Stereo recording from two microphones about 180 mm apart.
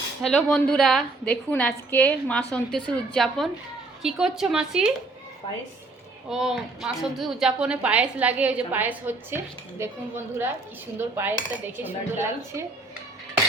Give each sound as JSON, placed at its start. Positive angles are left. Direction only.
{"t": 0.2, "sound": "a woman's voice", "side_deg": 5}
{"t": 5.4, "sound": "speech", "side_deg": 30}
{"t": 6.3, "sound": "a woman's voice", "side_deg": -5}
{"t": 10.9, "sound": "a woman's voice", "side_deg": -10}